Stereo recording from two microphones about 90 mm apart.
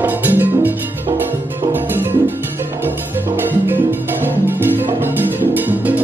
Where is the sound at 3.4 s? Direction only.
25° right (ahead or behind).